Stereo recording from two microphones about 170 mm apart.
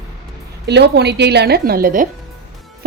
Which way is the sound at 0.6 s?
80° right.